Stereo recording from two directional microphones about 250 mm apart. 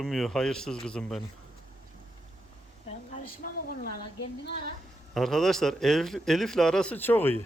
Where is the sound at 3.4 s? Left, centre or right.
Left.